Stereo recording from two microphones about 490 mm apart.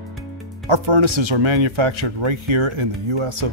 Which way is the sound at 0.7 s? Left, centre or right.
Right.